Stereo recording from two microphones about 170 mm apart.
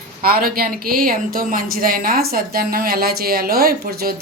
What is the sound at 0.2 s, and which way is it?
A woman's voice, 60° right (ahead or behind).